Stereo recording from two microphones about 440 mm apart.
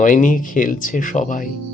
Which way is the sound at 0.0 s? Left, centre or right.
Centre.